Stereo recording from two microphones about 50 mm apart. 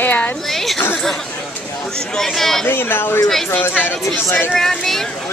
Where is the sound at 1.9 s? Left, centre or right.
Centre.